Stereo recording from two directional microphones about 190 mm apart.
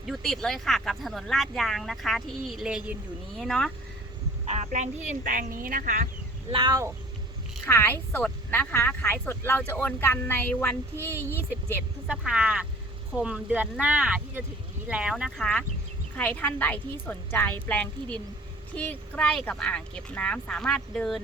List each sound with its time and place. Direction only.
0.0 s speech: centre (ahead or behind)
4.4 s speech: 35° right (ahead or behind)
6.5 s speech: 25° right (ahead or behind)
7.7 s speech: 10° left (ahead or behind)
12.0 s speech: 5° right (ahead or behind)